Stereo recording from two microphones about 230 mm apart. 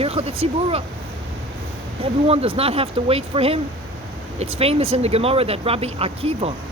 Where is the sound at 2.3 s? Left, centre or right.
Right.